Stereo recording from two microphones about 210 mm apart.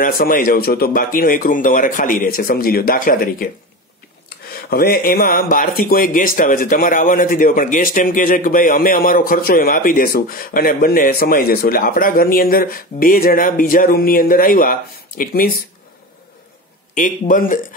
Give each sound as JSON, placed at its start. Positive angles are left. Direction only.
{"t": 0.0, "sound": "speech", "side_deg": 40}
{"t": 4.6, "sound": "speech", "side_deg": 45}
{"t": 16.9, "sound": "speech", "side_deg": 40}